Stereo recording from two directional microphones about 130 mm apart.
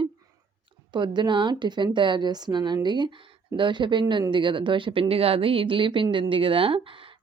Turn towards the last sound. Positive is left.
turn(degrees=-45)  # may be behind; listen again after turning